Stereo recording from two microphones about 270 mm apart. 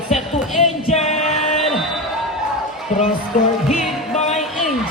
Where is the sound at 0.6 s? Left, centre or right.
Left.